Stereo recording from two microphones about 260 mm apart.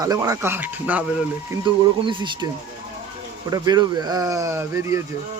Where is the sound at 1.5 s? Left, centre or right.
Centre.